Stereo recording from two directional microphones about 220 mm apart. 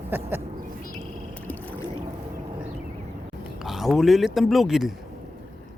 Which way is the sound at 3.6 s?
Centre (ahead or behind).